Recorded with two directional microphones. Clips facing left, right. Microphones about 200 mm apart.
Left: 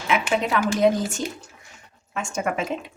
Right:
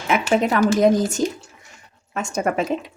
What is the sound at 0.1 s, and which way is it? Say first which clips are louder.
Speech: right 4 dB; 45° right (ahead or behind).